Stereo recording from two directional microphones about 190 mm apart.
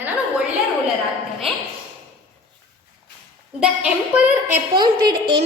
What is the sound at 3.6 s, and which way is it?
Speech, 5° right (ahead or behind).